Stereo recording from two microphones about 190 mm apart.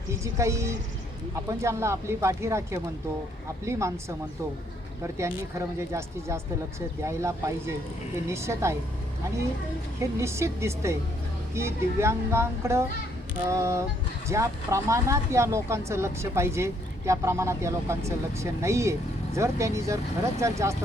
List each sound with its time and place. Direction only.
0.1 s speech: 15° right (ahead or behind)
5.5 s speech: 15° right (ahead or behind)
10.0 s speech: 15° right (ahead or behind)